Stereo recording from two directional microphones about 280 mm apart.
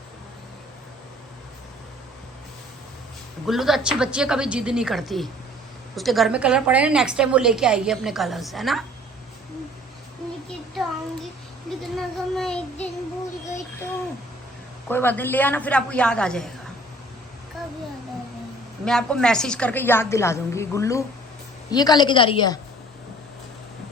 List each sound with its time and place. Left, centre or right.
3.4 s a woman's voice: centre
11.9 s a woman's voice: centre
14.8 s a woman's voice: centre
18.9 s a woman's voice: centre